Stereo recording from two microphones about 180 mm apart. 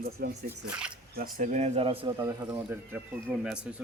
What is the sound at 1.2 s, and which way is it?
Speech, 45° right (ahead or behind).